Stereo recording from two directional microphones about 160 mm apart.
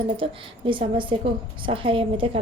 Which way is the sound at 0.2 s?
30° right (ahead or behind).